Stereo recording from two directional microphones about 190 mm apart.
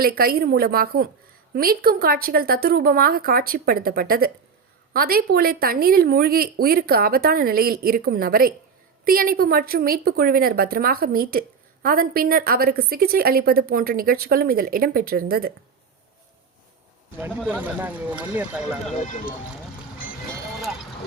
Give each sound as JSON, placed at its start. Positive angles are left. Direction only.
{"t": 0.0, "sound": "a woman's voice", "side_deg": -50}
{"t": 17.2, "sound": "speech", "side_deg": -10}